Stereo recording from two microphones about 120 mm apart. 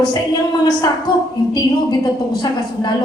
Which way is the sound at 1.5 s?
35° left (ahead or behind).